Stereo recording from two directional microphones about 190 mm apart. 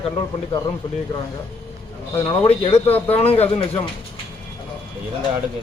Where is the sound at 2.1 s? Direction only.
25° left (ahead or behind).